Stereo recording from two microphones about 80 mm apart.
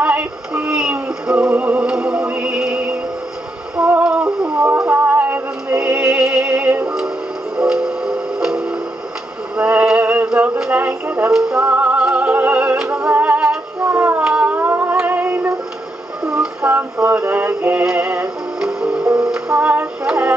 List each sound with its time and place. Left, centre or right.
0.0 s synthetic singing: centre
3.7 s music: centre
9.6 s a sound: centre
11.3 s music: centre
11.6 s music: right
13.8 s child singing: right
14.2 s a sound: centre
14.7 s music: right
16.6 s music: centre